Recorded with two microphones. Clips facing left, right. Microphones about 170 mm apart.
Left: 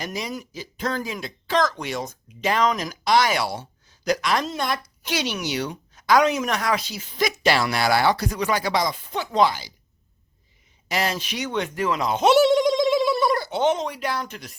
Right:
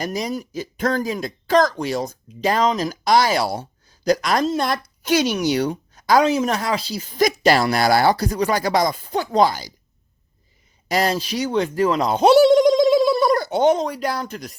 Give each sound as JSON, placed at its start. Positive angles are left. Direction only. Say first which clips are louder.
{"t": 0.0, "sound": "speech", "louder": "right 5 dB", "side_deg": -40}
{"t": 10.8, "sound": "speech", "louder": "right 5 dB", "side_deg": -40}